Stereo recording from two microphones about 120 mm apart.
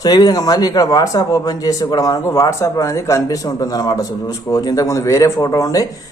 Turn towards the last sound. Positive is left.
turn(degrees=30)  # may be behind; listen again after turning